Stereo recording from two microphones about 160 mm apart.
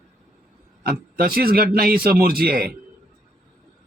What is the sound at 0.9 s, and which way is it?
A man's voice, 70° right (ahead or behind).